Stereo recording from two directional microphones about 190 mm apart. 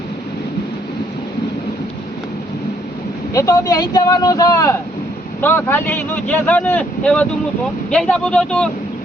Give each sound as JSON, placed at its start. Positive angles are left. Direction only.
{"t": 3.3, "sound": "speech", "side_deg": 20}